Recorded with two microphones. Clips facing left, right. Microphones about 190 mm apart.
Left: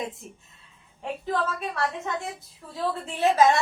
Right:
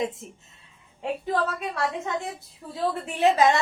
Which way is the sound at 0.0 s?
20° right (ahead or behind).